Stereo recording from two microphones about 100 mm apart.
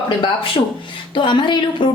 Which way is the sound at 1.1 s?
50° left (ahead or behind).